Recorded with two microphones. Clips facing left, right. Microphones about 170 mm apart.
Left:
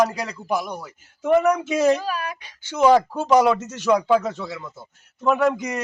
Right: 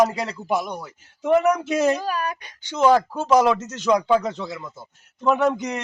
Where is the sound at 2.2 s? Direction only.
50° right (ahead or behind).